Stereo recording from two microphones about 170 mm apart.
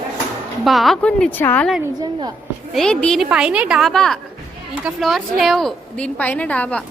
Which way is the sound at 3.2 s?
5° right (ahead or behind).